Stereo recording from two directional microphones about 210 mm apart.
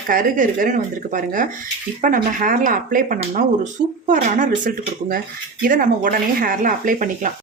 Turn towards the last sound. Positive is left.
turn(degrees=-40)  # may be behind; listen again after turning